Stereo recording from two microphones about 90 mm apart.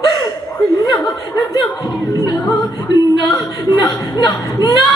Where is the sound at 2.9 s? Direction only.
50° left (ahead or behind).